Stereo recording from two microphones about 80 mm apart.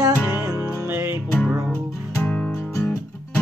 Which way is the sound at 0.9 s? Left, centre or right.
Right.